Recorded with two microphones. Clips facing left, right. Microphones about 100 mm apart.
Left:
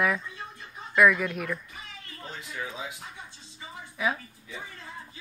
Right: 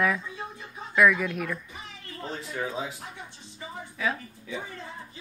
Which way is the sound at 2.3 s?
35° right (ahead or behind).